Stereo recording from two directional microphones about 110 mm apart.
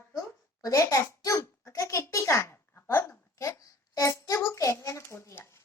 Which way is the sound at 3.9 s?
30° left (ahead or behind).